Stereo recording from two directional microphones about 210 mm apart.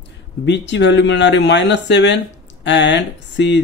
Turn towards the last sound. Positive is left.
turn(degrees=55)  # may be behind; listen again after turning